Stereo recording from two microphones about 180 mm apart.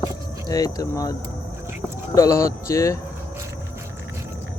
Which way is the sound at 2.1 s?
15° left (ahead or behind).